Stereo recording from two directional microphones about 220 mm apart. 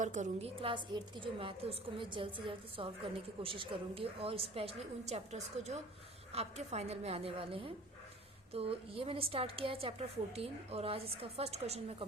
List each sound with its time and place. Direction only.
0.0 s a woman's voice: 35° right (ahead or behind)